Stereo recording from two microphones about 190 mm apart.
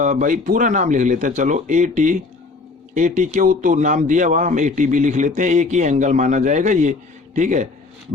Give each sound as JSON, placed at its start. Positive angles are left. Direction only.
{"t": 0.0, "sound": "a man's voice", "side_deg": -40}